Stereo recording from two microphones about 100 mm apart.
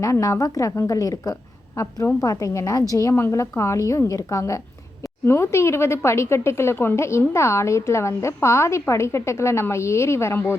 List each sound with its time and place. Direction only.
0.0 s a woman's voice: 35° left (ahead or behind)